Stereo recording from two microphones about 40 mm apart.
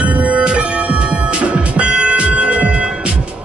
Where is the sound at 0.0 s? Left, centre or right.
Right.